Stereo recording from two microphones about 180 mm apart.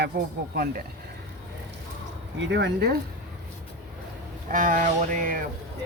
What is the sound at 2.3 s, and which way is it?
Speech, 85° right.